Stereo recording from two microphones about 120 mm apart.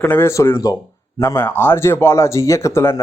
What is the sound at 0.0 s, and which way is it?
Speech, 15° left (ahead or behind).